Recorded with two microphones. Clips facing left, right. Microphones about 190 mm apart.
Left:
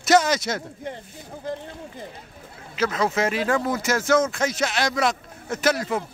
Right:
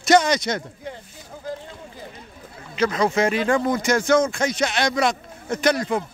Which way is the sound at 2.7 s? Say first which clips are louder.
Right 3 dB; 5° left (ahead or behind).